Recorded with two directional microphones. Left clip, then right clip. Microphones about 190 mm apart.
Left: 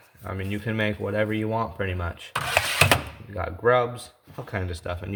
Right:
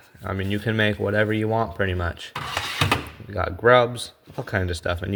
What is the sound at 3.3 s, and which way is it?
Speech, 35° right (ahead or behind).